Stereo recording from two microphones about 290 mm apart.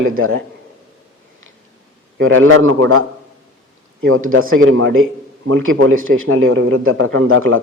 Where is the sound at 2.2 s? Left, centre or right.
Right.